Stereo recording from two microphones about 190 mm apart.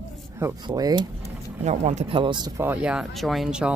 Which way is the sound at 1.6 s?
35° right (ahead or behind).